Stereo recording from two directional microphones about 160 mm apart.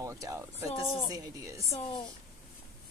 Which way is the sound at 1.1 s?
20° right (ahead or behind).